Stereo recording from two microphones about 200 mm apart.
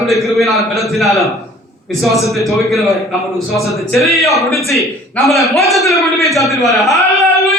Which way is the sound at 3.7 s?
Centre (ahead or behind).